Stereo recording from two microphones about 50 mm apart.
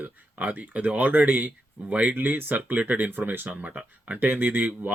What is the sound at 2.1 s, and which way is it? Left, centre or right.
Speech, right.